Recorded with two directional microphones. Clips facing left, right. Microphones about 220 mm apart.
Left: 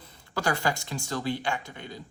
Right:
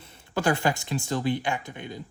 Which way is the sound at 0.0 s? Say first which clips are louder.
Right 4 dB; 25° right (ahead or behind).